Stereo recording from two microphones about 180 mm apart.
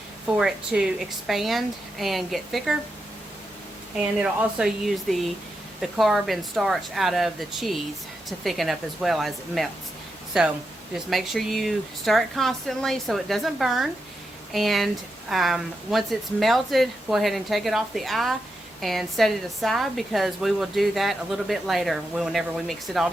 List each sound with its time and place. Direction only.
0.3 s a woman's voice: 5° right (ahead or behind)
4.2 s a woman's voice: 5° right (ahead or behind)